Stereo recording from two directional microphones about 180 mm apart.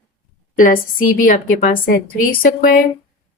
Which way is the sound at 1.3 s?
55° left (ahead or behind).